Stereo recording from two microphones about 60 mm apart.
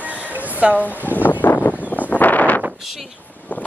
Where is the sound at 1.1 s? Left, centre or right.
Left.